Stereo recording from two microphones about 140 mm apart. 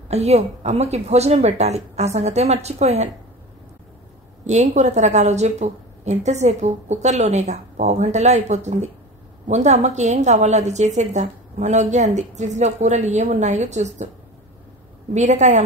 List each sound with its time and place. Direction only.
0.1 s a woman's voice: 50° right (ahead or behind)
4.5 s a woman's voice: 55° right (ahead or behind)
15.1 s a woman's voice: 55° right (ahead or behind)